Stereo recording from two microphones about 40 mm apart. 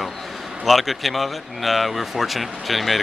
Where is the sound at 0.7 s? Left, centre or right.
Centre.